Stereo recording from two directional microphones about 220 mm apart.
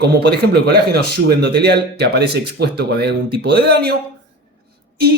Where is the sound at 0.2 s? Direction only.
50° right (ahead or behind).